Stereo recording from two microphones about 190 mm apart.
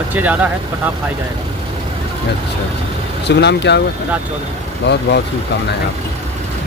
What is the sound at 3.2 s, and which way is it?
Speech, 65° left (ahead or behind).